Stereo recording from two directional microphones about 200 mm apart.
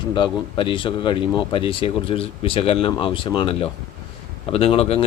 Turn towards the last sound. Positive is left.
turn(degrees=30)  # may be behind; listen again after turning